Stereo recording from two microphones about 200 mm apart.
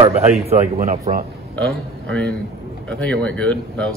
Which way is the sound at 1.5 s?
5° left (ahead or behind).